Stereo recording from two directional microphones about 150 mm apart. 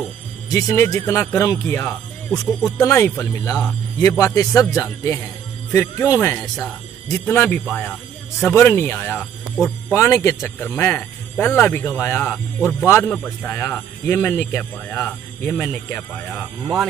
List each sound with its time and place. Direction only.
0.5 s speech: 20° left (ahead or behind)